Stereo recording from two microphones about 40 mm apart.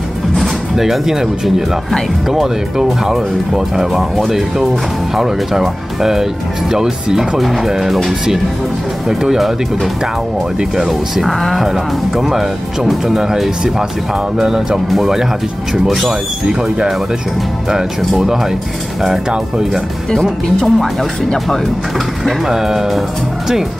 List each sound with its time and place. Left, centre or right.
0.4 s speech: centre
10.8 s speech: centre
11.6 s speech: centre
20.2 s speech: centre
22.5 s speech: centre